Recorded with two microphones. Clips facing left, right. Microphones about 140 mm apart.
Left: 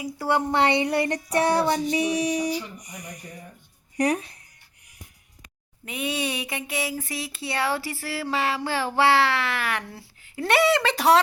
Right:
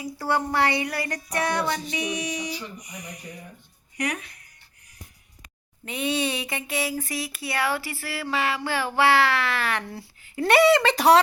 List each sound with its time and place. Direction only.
0.0 s child singing: 15° left (ahead or behind); by 3.3 s 50° left (ahead or behind)
3.9 s child singing: 30° left (ahead or behind)
5.8 s a sound: 5° left (ahead or behind)
7.3 s child singing: 25° left (ahead or behind)
9.0 s speech: 25° left (ahead or behind); by 11.2 s centre (ahead or behind)